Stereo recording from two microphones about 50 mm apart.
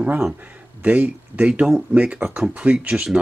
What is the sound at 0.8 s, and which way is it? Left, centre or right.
Speech, right.